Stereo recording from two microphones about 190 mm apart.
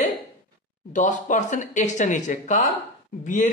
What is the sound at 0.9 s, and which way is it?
Speech, 40° left (ahead or behind).